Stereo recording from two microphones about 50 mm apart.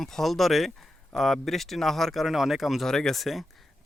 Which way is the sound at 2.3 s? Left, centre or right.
Centre.